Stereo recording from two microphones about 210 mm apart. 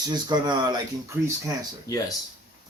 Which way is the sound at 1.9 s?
15° left (ahead or behind).